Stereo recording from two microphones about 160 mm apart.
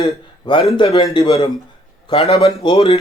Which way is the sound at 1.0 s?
35° left (ahead or behind).